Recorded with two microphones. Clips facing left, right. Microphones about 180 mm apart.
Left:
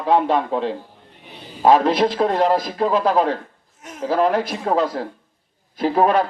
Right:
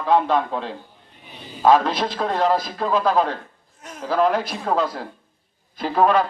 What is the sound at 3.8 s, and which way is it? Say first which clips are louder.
Speech: left 1 dB; 20° left (ahead or behind).